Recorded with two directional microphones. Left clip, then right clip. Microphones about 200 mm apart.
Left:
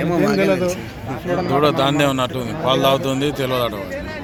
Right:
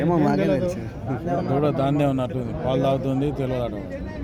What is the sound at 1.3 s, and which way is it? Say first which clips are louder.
Speech: left 6 dB; 35° left (ahead or behind).